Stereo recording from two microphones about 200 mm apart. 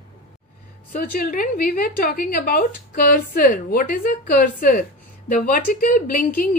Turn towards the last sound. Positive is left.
turn(degrees=45)  # may be behind; listen again after turning